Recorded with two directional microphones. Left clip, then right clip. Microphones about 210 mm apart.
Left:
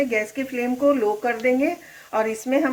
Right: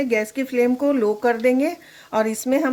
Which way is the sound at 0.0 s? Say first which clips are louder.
Right 1 dB; 50° right (ahead or behind).